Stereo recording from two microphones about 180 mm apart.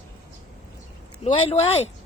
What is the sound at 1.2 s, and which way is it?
Speech, 35° left (ahead or behind).